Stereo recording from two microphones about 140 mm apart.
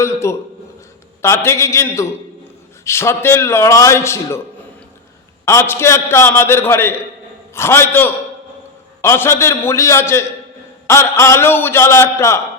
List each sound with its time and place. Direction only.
0.0 s a man's voice: 20° left (ahead or behind)
5.5 s a man's voice: 20° left (ahead or behind)